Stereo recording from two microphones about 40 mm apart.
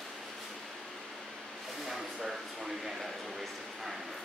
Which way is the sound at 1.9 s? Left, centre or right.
Centre.